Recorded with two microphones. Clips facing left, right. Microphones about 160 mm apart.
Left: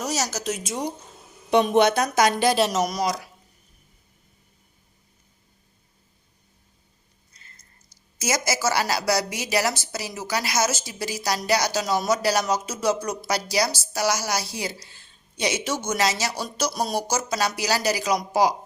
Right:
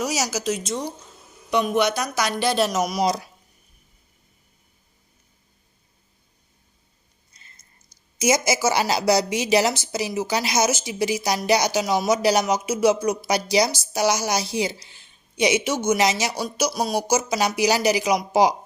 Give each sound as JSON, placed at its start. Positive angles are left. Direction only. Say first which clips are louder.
{"t": 0.0, "sound": "speech", "louder": "right 2 dB", "side_deg": -10}
{"t": 2.0, "sound": "speech", "louder": "left 4 dB", "side_deg": 20}
{"t": 2.6, "sound": "speech", "louder": "even", "side_deg": 0}
{"t": 3.0, "sound": "speech", "louder": "right 3 dB", "side_deg": -25}
{"t": 7.3, "sound": "speech", "louder": "left 1 dB", "side_deg": -20}